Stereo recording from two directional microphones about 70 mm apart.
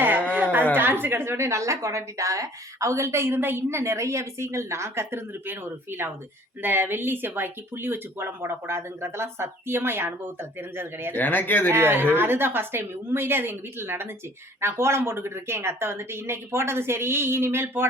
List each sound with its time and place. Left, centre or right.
0.0 s a sound: right
0.8 s a woman's voice: right
11.1 s speech: left
11.7 s a woman's voice: right